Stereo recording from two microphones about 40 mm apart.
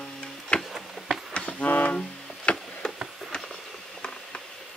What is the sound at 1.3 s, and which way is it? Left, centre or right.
Music, left.